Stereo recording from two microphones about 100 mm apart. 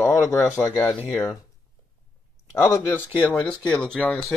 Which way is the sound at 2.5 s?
30° left (ahead or behind).